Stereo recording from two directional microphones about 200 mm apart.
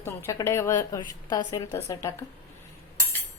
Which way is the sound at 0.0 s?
15° left (ahead or behind).